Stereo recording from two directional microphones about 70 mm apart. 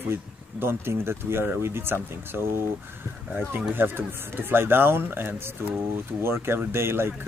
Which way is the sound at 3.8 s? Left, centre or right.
Right.